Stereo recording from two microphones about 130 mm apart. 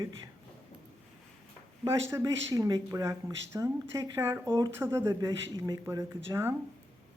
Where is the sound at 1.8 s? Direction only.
25° right (ahead or behind).